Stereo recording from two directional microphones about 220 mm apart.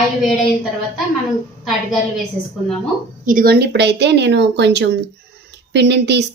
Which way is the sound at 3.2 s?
40° right (ahead or behind).